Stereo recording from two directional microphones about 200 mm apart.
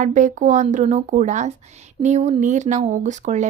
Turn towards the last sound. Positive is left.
turn(degrees=-35)  # may be behind; listen again after turning